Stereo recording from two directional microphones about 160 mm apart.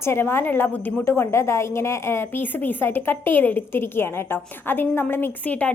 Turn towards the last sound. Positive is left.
turn(degrees=10)  # may be behind; listen again after turning